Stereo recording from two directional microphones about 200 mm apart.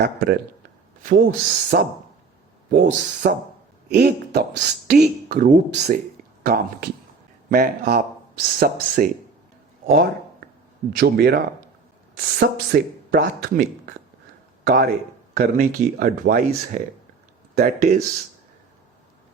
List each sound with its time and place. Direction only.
0.0 s a woman's voice: 50° right (ahead or behind)
14.6 s a sound: 50° right (ahead or behind)
15.4 s a woman's voice: 45° right (ahead or behind)